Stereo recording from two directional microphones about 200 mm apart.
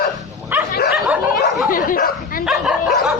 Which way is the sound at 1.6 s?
45° left (ahead or behind).